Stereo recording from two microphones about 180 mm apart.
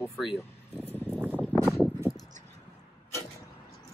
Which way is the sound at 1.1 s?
10° right (ahead or behind).